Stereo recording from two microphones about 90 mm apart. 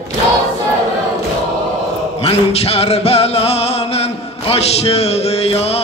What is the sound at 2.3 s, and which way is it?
Music, 90° left.